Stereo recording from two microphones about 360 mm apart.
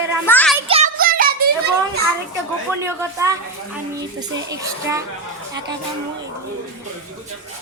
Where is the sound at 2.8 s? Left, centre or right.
Centre.